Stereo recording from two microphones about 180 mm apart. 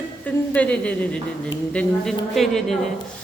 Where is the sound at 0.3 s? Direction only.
10° left (ahead or behind).